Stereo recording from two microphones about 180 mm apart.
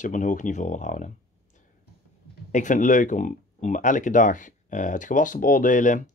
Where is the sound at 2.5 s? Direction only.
45° left (ahead or behind).